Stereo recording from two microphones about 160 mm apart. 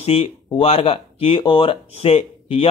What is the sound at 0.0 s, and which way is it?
Speech, 35° left (ahead or behind).